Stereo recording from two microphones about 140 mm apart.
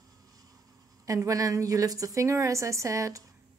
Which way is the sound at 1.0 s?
25° right (ahead or behind).